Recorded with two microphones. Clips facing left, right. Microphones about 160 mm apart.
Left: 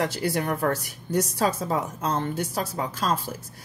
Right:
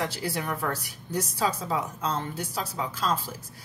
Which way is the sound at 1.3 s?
55° left (ahead or behind).